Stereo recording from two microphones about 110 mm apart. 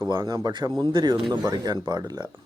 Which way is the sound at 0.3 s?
30° right (ahead or behind).